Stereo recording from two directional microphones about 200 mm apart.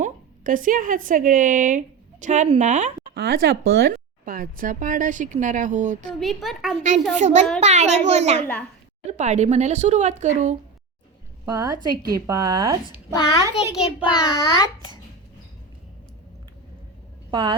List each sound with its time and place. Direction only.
0.0 s a woman's voice: 45° right (ahead or behind)
3.2 s speech: 55° right (ahead or behind); by 6.1 s 40° right (ahead or behind)
6.1 s a woman's voice: centre (ahead or behind)
7.1 s speech: 35° right (ahead or behind)
11.4 s a woman's voice: 20° right (ahead or behind)
14.1 s a child's voice: 20° left (ahead or behind)
17.3 s a woman's voice: 25° right (ahead or behind)